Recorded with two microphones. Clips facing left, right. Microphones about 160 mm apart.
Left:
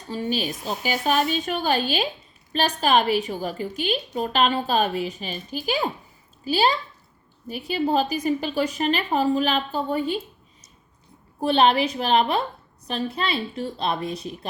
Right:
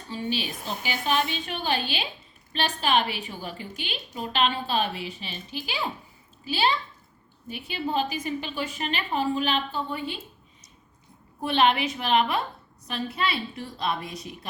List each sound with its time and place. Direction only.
0.1 s a woman's voice: 40° left (ahead or behind)
11.3 s a woman's voice: 35° left (ahead or behind)